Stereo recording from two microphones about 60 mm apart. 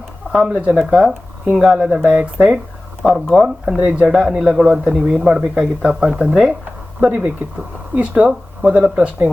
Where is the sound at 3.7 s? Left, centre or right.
Centre.